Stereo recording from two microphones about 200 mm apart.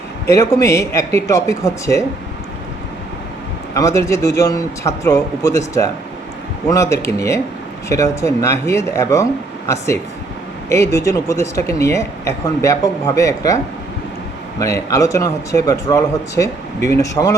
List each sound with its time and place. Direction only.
0.3 s speech: 15° left (ahead or behind)
3.8 s speech: 15° left (ahead or behind)
10.7 s speech: 15° left (ahead or behind)
14.6 s speech: 15° left (ahead or behind)